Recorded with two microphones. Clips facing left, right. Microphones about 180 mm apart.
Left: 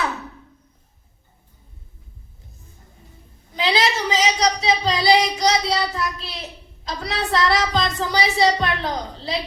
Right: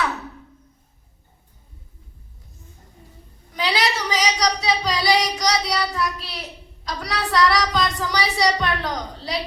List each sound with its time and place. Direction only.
3.5 s child singing: 25° left (ahead or behind)